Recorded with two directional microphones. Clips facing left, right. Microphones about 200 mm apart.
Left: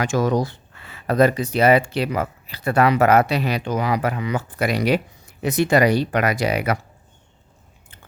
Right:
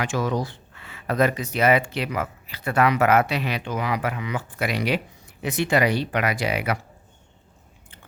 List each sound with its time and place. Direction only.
0.0 s speech: 40° left (ahead or behind)